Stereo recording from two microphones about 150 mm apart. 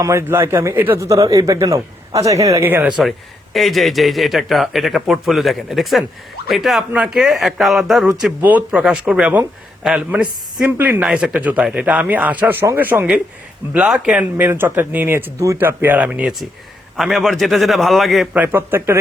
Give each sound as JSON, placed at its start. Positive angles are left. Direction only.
{"t": 0.0, "sound": "speech", "side_deg": -20}
{"t": 2.8, "sound": "a man's voice", "side_deg": 0}
{"t": 18.3, "sound": "a man's voice", "side_deg": -15}